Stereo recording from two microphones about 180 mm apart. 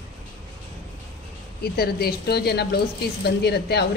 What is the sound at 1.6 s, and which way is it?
Speech, 60° left (ahead or behind).